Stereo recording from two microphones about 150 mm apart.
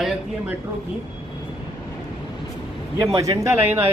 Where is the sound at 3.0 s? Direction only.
20° right (ahead or behind).